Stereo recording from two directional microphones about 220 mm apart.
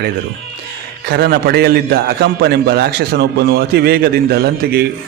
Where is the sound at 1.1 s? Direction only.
45° right (ahead or behind).